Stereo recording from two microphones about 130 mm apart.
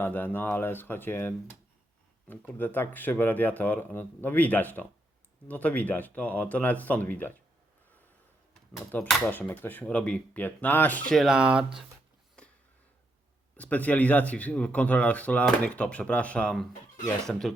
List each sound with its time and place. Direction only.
0.0 s speech: 15° left (ahead or behind)
2.6 s speech: 15° left (ahead or behind)
8.9 s speech: 10° left (ahead or behind)
11.1 s speech: centre (ahead or behind)
13.6 s speech: 10° left (ahead or behind)